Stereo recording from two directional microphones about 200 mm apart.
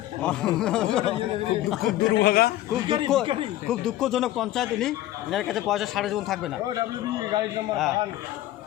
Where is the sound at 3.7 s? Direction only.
5° left (ahead or behind).